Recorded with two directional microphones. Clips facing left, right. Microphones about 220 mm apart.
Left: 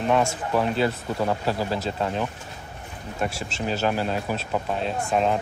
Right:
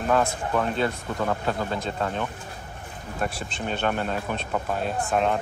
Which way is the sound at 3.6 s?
5° left (ahead or behind).